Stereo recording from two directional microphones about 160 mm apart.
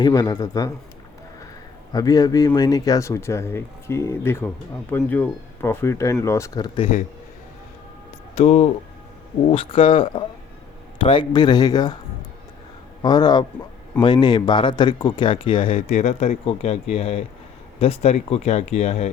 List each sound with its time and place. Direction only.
0.0 s speech: 25° left (ahead or behind)
1.9 s speech: 25° left (ahead or behind)
8.4 s speech: 40° left (ahead or behind); by 11.9 s 25° left (ahead or behind)
13.0 s speech: 25° left (ahead or behind)
15.9 s speech: 45° left (ahead or behind)